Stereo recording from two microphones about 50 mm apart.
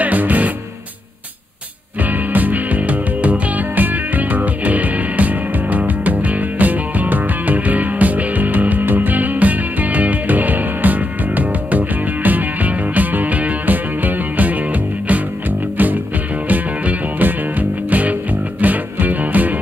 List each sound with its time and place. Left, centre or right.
0.0 s music: right
2.0 s music: right
16.4 s music: right